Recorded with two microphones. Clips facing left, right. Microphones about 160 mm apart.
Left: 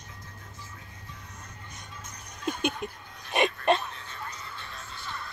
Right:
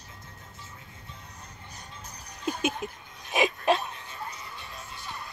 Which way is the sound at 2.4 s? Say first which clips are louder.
Even; 5° right (ahead or behind).